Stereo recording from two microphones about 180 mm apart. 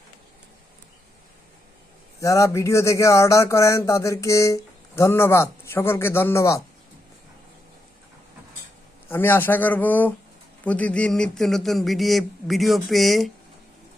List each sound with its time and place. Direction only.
2.2 s speech: 20° left (ahead or behind)
9.0 s speech: 10° left (ahead or behind)